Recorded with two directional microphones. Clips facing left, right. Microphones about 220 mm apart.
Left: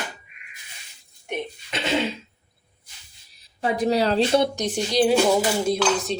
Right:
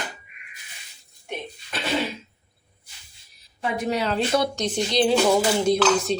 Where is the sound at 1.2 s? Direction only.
20° left (ahead or behind).